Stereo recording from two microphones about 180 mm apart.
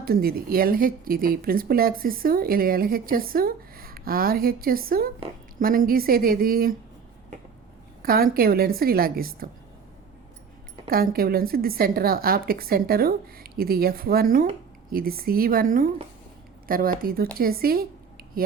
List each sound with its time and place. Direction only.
0.0 s speech: 55° right (ahead or behind)
8.0 s speech: 55° right (ahead or behind)
10.8 s speech: 55° right (ahead or behind)